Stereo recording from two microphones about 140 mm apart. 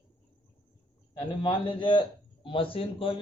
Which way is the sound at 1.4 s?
35° left (ahead or behind).